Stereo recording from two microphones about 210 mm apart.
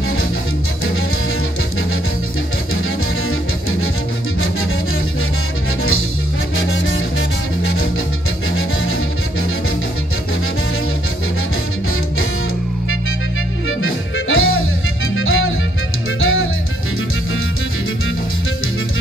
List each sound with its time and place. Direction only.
6.5 s music: 65° left (ahead or behind)
13.7 s music: 70° left (ahead or behind)